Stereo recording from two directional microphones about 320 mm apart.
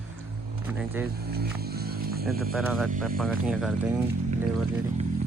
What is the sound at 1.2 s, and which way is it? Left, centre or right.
Speech, right.